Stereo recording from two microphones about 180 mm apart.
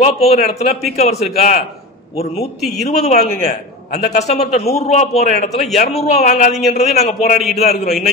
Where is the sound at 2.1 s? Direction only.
35° left (ahead or behind).